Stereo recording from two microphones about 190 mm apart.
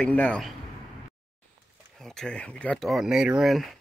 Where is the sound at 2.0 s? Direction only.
Centre (ahead or behind).